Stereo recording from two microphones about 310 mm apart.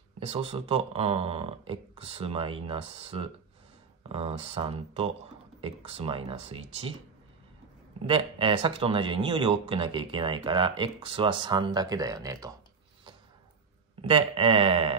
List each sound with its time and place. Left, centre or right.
0.2 s speech: centre
8.1 s speech: centre
14.0 s speech: centre